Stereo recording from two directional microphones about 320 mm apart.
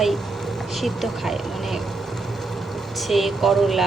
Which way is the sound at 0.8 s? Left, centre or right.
Centre.